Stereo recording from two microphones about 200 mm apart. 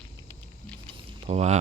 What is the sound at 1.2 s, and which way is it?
Speech, 35° right (ahead or behind).